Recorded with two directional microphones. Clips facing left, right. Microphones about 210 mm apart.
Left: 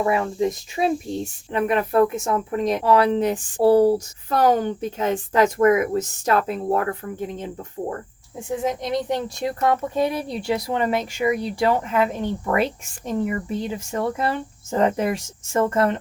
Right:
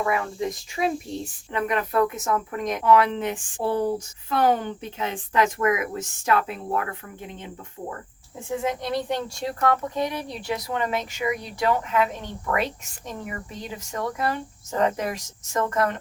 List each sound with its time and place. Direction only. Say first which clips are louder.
0.0 s speech: left 5 dB; 25° left (ahead or behind)
8.7 s speech: left 3 dB; 20° left (ahead or behind)
13.7 s speech: left 5 dB; 30° left (ahead or behind)